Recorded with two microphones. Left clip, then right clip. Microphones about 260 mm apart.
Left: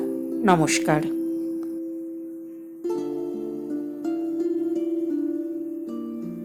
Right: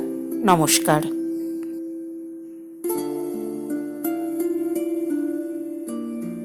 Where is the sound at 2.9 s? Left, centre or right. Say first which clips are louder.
Right 2 dB; right.